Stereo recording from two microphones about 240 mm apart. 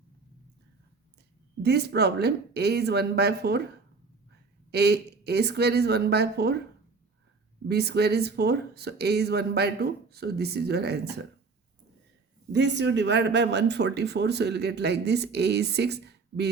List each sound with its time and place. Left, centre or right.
1.6 s speech: right
4.7 s speech: right
7.7 s speech: right
12.5 s speech: right